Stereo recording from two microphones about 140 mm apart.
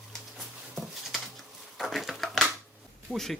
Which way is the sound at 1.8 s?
Centre (ahead or behind).